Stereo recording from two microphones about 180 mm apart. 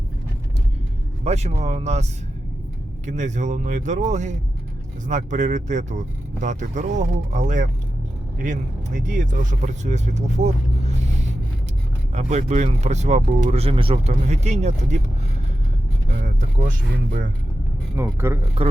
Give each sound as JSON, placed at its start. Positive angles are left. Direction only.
{"t": 1.2, "sound": "speech", "side_deg": -40}
{"t": 3.1, "sound": "speech", "side_deg": -40}
{"t": 9.0, "sound": "speech", "side_deg": -45}
{"t": 12.1, "sound": "speech", "side_deg": -40}
{"t": 17.1, "sound": "speech", "side_deg": -50}
{"t": 17.9, "sound": "speech", "side_deg": -15}
{"t": 18.6, "sound": "speech", "side_deg": -30}